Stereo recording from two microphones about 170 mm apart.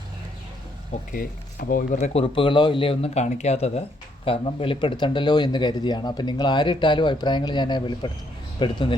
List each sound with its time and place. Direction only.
1.1 s speech: 55° left (ahead or behind)
2.2 s speech: 30° left (ahead or behind)